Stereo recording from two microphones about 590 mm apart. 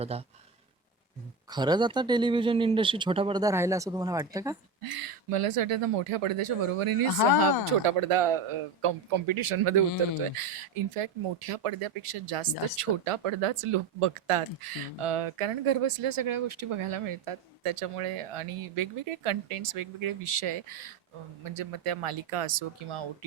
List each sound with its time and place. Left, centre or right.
0.1 s a man's voice: centre
1.5 s a man's voice: centre
4.8 s speech: right